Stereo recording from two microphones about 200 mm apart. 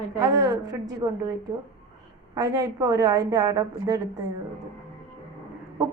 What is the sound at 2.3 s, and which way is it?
A woman's voice, 15° right (ahead or behind).